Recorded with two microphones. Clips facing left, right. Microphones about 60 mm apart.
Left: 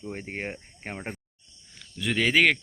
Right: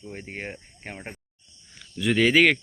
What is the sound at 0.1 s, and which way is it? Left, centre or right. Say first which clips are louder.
Speech: left 1 dB; left.